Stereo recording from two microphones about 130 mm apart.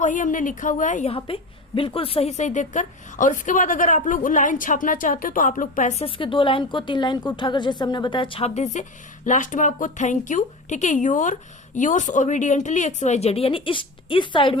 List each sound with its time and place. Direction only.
0.0 s a woman's voice: 75° left (ahead or behind)
1.0 s a woman's voice: 45° left (ahead or behind); by 6.0 s 85° left
6.0 s a woman's voice: 45° left (ahead or behind)